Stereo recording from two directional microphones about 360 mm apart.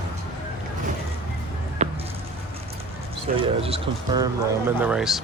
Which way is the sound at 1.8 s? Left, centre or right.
Centre.